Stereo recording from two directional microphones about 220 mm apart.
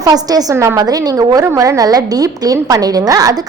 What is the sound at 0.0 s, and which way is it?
A woman's voice, 15° right (ahead or behind).